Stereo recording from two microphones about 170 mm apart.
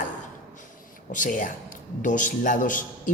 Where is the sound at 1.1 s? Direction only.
50° left (ahead or behind).